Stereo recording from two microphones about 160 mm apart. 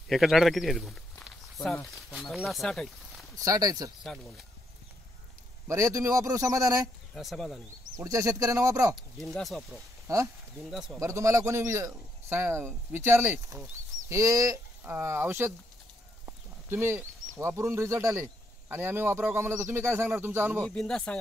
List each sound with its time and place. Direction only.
0.1 s speech: centre (ahead or behind)
3.3 s a man's voice: 20° right (ahead or behind)
5.7 s a man's voice: 20° right (ahead or behind)
7.2 s speech: centre (ahead or behind)
8.0 s a man's voice: 20° right (ahead or behind)
9.2 s speech: centre (ahead or behind)
10.0 s speech: 20° right (ahead or behind)
10.7 s speech: centre (ahead or behind)
11.0 s a man's voice: 20° right (ahead or behind)
16.3 s clip-clop: 15° right (ahead or behind)
17.4 s a man's voice: 20° right (ahead or behind)
20.6 s speech: 5° left (ahead or behind)